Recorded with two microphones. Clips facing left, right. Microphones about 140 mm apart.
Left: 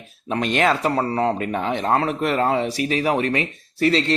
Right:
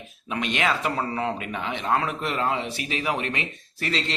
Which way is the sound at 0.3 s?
40° left (ahead or behind).